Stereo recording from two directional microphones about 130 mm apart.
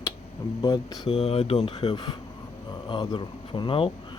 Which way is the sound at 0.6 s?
30° left (ahead or behind).